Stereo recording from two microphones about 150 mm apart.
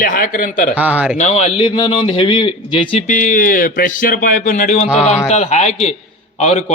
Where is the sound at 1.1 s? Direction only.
50° left (ahead or behind); by 2.8 s 30° left (ahead or behind).